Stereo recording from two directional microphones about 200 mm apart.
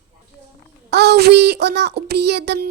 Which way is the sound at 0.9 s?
55° right (ahead or behind).